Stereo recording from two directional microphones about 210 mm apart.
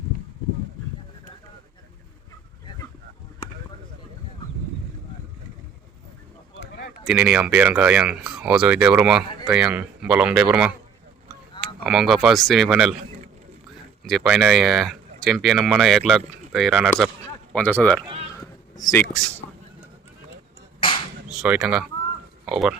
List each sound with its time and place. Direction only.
7.0 s speech: 5° right (ahead or behind)
14.0 s speech: centre (ahead or behind); by 19.0 s 15° left (ahead or behind)
21.4 s speech: 5° right (ahead or behind)